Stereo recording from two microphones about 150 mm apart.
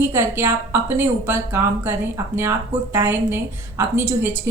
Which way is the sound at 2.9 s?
15° right (ahead or behind).